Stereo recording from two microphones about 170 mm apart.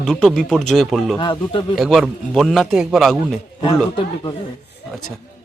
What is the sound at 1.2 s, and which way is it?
Speech, 30° left (ahead or behind).